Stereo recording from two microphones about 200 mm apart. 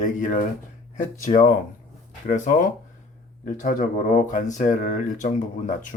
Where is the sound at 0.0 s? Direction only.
40° left (ahead or behind).